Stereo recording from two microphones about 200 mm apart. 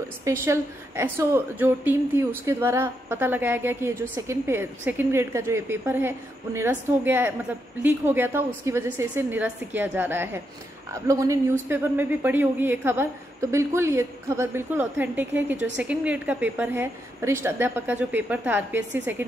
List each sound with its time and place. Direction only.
0.2 s a woman's voice: 15° right (ahead or behind)
18.8 s a woman's voice: 60° right (ahead or behind)